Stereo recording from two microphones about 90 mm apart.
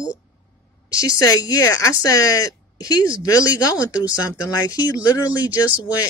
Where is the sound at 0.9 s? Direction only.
40° left (ahead or behind).